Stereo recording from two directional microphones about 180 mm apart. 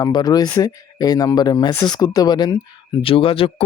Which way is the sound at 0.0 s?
20° left (ahead or behind).